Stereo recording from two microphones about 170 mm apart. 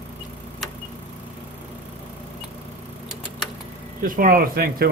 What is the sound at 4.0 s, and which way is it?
Speech, 55° right (ahead or behind).